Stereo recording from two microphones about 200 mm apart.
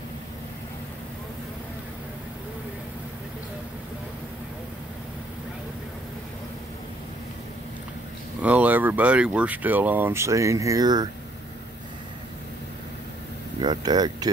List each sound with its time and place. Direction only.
8.4 s speech: 5° right (ahead or behind)
13.6 s speech: 20° right (ahead or behind)